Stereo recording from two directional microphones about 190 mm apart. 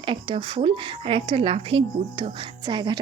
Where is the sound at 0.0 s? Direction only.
30° right (ahead or behind).